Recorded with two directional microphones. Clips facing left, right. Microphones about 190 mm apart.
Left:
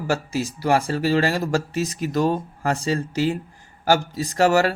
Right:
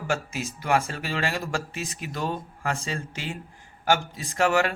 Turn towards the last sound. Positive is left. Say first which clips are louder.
# left 5 dB
turn(degrees=40)  # may be behind; listen again after turning